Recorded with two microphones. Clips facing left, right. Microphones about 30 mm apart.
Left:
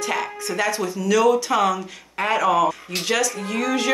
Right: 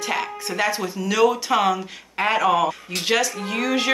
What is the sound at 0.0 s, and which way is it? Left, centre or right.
Speech, right.